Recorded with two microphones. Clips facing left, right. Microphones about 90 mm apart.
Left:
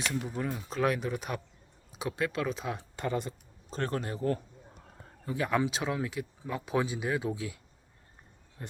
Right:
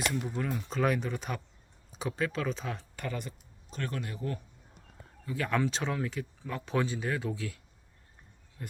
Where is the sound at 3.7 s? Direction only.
35° left (ahead or behind).